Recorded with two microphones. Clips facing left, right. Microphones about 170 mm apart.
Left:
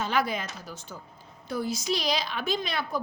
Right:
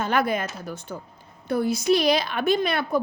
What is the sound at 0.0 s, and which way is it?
A woman's voice, 55° right (ahead or behind).